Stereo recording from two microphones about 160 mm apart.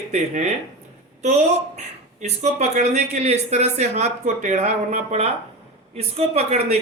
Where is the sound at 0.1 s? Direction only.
45° right (ahead or behind).